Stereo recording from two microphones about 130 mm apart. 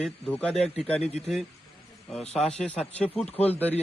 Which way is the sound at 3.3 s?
50° left (ahead or behind).